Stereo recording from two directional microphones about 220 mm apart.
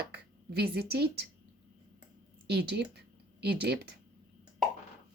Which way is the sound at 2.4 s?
50° right (ahead or behind).